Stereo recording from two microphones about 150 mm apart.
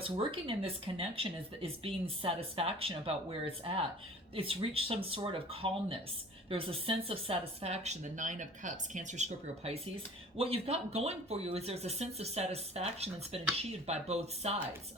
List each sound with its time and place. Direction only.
0.0 s speech: 35° right (ahead or behind)
10.3 s speech: 40° right (ahead or behind)